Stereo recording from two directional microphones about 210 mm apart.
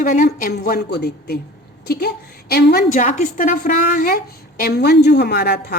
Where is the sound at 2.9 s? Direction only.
35° left (ahead or behind).